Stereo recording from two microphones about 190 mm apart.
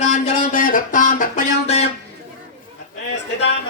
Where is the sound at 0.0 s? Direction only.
40° left (ahead or behind).